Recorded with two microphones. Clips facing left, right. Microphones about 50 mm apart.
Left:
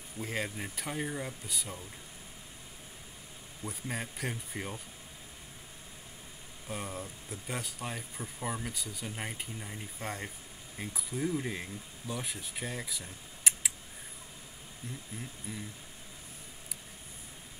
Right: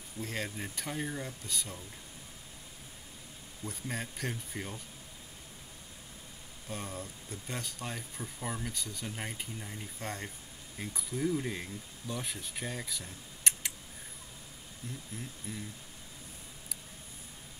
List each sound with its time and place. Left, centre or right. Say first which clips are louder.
0.2 s speech: left 2 dB; centre
3.6 s speech: left 1 dB; centre
6.7 s speech: left 2 dB; centre
14.8 s speech: even; centre